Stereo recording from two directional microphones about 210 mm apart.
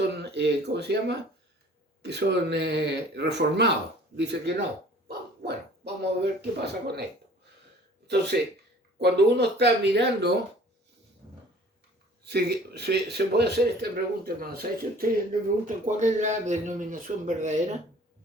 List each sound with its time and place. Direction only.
0.1 s speech: 55° right (ahead or behind)
8.0 s speech: 55° right (ahead or behind)
12.2 s speech: 50° right (ahead or behind); by 17.7 s 35° right (ahead or behind)